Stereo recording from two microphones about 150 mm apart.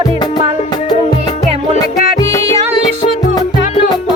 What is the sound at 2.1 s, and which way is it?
Music, 20° left (ahead or behind).